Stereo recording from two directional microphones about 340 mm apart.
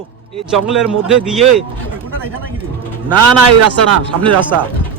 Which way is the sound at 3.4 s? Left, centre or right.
Right.